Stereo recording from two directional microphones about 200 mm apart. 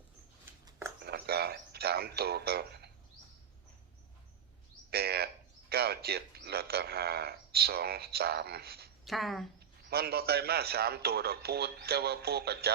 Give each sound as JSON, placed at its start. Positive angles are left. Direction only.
{"t": 1.0, "sound": "a sound", "side_deg": -50}
{"t": 4.9, "sound": "a man's voice", "side_deg": -50}
{"t": 9.0, "sound": "a woman's voice", "side_deg": 0}
{"t": 9.9, "sound": "a man's voice", "side_deg": -50}